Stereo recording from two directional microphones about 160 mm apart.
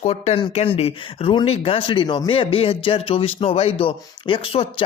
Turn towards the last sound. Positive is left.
turn(degrees=35)  # may be behind; listen again after turning